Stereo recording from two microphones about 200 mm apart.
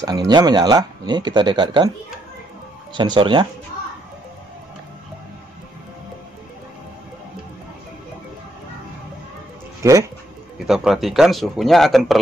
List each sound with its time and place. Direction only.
0.0 s speech: 20° right (ahead or behind)
2.9 s speech: 25° right (ahead or behind)
9.8 s speech: 15° right (ahead or behind)
10.7 s speech: centre (ahead or behind)